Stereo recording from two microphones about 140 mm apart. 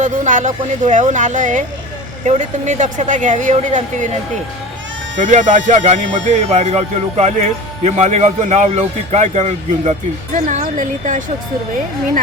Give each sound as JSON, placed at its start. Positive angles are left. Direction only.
{"t": 0.0, "sound": "speech", "side_deg": -60}